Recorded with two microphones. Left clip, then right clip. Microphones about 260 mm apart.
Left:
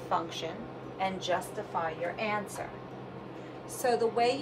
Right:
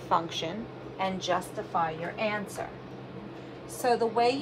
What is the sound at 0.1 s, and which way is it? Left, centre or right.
A woman's voice, centre.